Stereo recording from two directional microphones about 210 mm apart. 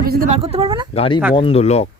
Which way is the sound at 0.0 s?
45° right (ahead or behind).